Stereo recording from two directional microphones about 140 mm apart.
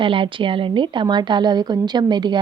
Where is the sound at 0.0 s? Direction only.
40° right (ahead or behind).